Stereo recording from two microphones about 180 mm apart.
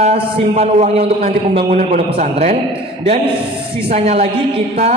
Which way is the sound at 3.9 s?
35° right (ahead or behind).